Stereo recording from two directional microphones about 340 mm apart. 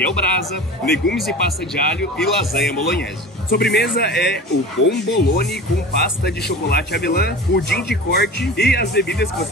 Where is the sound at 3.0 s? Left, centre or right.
Left.